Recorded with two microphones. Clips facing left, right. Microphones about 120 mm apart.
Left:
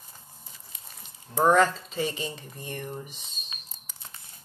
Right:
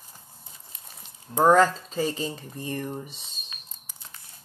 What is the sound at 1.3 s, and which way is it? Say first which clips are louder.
Speech: right 2 dB; 35° right (ahead or behind).